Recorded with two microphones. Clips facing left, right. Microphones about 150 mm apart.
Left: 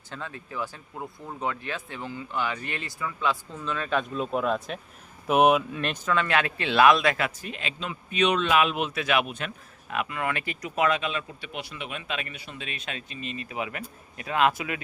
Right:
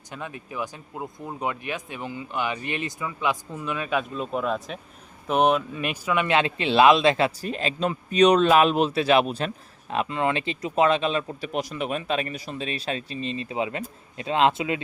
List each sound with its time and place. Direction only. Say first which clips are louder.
0.1 s speech: right 2 dB; 15° right (ahead or behind); by 5.8 s 5° left (ahead or behind)
5.8 s speech: right 2 dB; 10° right (ahead or behind)